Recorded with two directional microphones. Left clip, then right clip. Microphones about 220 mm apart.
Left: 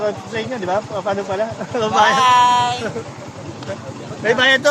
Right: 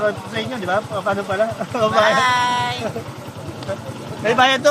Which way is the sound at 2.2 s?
20° left (ahead or behind).